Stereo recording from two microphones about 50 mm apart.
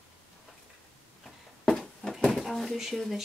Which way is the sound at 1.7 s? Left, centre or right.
Centre.